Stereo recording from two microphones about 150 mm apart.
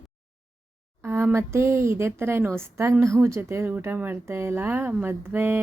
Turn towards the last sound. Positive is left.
turn(degrees=-15)  # may be behind; listen again after turning